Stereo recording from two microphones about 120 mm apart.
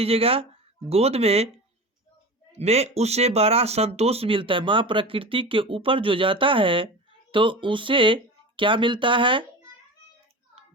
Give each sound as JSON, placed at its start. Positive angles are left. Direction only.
{"t": 0.0, "sound": "speech", "side_deg": -55}
{"t": 2.5, "sound": "speech", "side_deg": -60}